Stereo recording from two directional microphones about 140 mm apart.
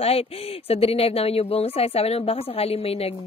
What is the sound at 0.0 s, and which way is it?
Speech, 45° left (ahead or behind).